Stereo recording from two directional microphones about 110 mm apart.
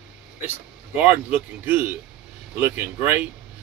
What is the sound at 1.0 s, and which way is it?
Speech, 15° right (ahead or behind).